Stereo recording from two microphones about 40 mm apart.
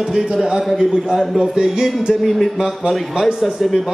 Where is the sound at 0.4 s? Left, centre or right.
Centre.